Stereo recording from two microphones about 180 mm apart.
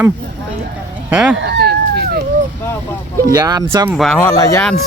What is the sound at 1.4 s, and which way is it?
Speech, 65° right (ahead or behind).